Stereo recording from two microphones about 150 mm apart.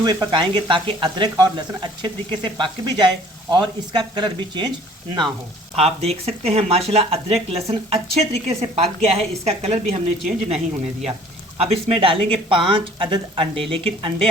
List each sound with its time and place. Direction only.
0.0 s speech: 25° right (ahead or behind)
5.7 s a woman's voice: 40° right (ahead or behind)